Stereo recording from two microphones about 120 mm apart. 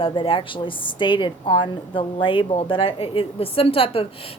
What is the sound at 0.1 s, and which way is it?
A woman's voice, 45° left (ahead or behind).